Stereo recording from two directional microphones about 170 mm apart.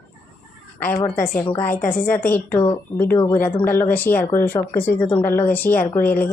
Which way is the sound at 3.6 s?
10° left (ahead or behind).